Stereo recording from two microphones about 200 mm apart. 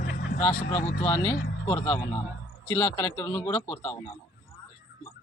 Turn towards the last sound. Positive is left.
turn(degrees=10)  # may be behind; listen again after turning